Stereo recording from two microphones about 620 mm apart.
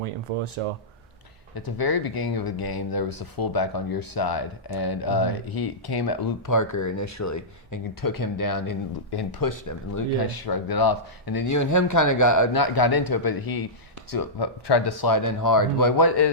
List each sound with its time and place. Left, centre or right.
0.0 s speech: right
1.5 s speech: left